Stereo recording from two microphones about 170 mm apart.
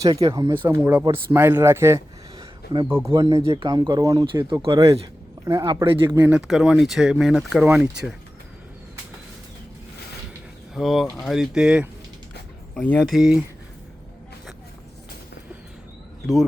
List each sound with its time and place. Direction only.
0.0 s speech: 20° right (ahead or behind)
3.4 s speech: 30° right (ahead or behind)
5.5 s speech: 20° right (ahead or behind); by 8.1 s 5° right (ahead or behind)
10.8 s speech: centre (ahead or behind)
12.7 s speech: 10° left (ahead or behind)
13.1 s speech: 5° right (ahead or behind)
16.2 s speech: centre (ahead or behind)